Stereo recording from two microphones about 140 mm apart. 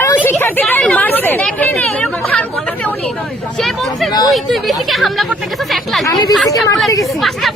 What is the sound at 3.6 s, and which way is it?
Speech, centre (ahead or behind).